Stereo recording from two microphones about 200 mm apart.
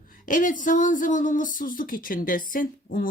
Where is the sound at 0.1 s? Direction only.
40° left (ahead or behind).